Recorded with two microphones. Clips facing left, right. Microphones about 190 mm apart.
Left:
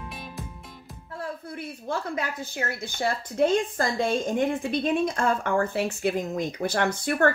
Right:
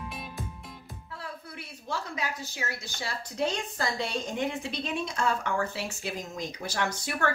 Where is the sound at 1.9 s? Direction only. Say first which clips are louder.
Left 4 dB; 55° left (ahead or behind).